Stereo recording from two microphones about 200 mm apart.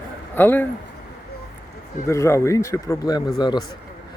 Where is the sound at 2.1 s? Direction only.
15° left (ahead or behind).